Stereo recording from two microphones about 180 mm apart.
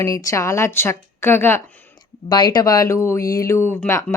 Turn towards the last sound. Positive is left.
turn(degrees=10)  # may be behind; listen again after turning